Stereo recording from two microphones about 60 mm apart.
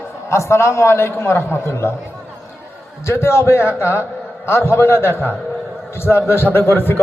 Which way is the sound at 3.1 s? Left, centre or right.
Left.